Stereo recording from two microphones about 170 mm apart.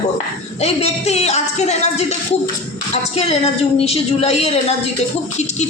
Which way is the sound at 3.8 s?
35° left (ahead or behind).